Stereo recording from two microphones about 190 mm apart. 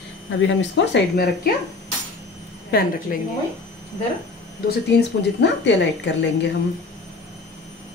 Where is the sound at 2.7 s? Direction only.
50° left (ahead or behind).